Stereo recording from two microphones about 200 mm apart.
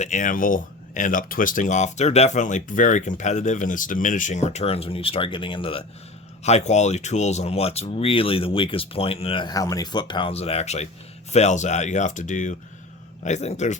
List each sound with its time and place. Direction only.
0.0 s speech: 40° left (ahead or behind)